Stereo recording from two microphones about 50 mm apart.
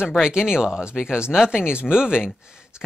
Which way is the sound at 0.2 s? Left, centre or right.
Centre.